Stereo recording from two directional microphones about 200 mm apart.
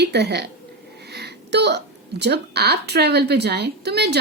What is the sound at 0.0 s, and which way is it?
A woman's voice, 55° right (ahead or behind).